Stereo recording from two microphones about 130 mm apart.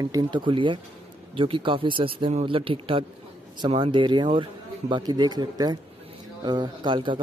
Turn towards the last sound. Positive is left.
turn(degrees=-35)  # may be behind; listen again after turning